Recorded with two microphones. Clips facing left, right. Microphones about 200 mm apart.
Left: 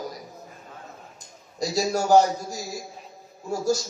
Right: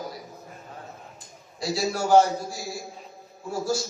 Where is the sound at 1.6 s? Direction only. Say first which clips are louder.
Left 2 dB; 45° left (ahead or behind).